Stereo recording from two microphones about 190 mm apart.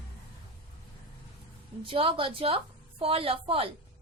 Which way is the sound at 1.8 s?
30° right (ahead or behind).